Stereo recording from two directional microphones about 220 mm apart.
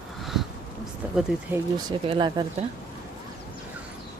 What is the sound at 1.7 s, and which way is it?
Speech, 20° right (ahead or behind).